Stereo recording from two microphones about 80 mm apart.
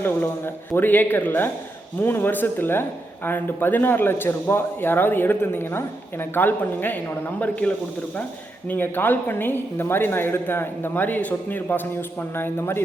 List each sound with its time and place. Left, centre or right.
0.0 s speech: left
8.7 s speech: left